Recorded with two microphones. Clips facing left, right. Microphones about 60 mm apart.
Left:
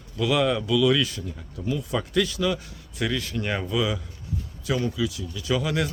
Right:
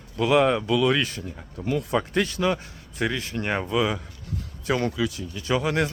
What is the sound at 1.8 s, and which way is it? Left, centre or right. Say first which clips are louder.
Speech: left 1 dB; right.